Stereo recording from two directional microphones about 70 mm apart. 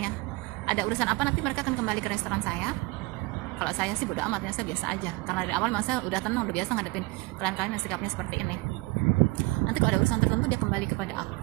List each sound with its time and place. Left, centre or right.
0.7 s a woman's voice: centre
9.7 s a woman's voice: centre